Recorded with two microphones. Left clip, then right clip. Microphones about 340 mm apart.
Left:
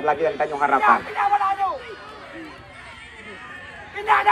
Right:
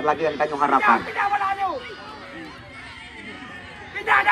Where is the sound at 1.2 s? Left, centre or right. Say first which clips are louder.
Left 2 dB; centre.